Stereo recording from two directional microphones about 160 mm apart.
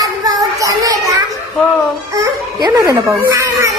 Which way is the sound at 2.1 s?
25° right (ahead or behind).